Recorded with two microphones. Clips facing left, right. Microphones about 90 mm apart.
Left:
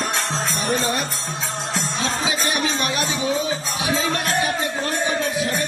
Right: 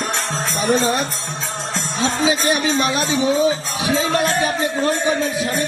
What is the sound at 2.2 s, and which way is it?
Music, 25° right (ahead or behind).